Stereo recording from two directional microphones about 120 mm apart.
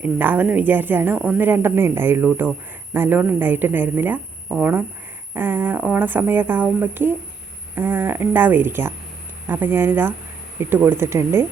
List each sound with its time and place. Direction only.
0.0 s a woman's voice: 15° right (ahead or behind)